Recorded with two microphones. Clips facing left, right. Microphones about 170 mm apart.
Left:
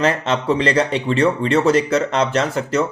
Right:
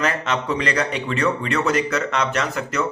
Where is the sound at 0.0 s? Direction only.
30° left (ahead or behind).